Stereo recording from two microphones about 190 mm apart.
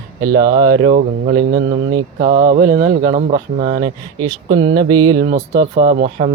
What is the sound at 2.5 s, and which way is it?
Speech, 45° right (ahead or behind).